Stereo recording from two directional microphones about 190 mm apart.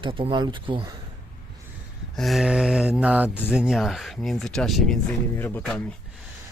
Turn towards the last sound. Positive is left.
turn(degrees=5)  # may be behind; listen again after turning